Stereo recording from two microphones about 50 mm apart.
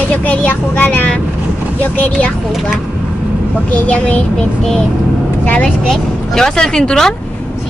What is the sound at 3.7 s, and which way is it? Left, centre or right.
Speech, left.